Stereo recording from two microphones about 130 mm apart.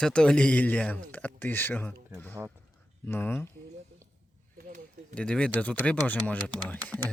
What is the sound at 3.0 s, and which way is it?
Speech, 15° left (ahead or behind).